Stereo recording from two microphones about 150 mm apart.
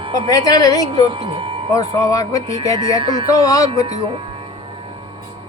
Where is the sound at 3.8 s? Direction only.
50° right (ahead or behind).